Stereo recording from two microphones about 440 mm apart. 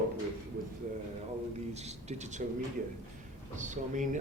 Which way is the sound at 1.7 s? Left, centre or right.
Centre.